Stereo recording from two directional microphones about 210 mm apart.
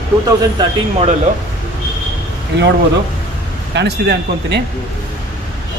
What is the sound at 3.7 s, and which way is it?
Speech, 55° right (ahead or behind).